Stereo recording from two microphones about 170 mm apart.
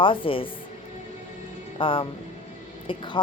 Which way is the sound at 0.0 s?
30° left (ahead or behind).